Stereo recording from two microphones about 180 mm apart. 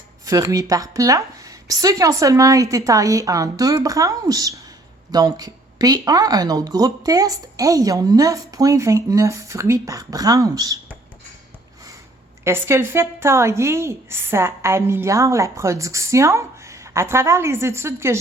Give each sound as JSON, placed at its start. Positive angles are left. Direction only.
{"t": 0.3, "sound": "speech", "side_deg": -20}
{"t": 12.5, "sound": "a woman's voice", "side_deg": -15}